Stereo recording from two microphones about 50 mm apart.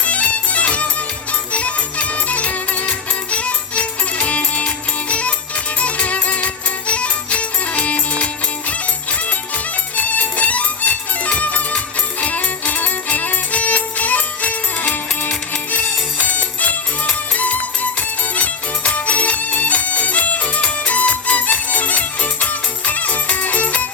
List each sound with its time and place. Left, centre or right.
0.0 s music: left
10.0 s music: left